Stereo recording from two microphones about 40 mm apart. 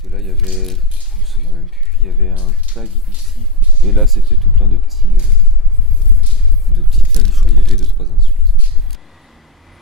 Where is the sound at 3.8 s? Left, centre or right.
Centre.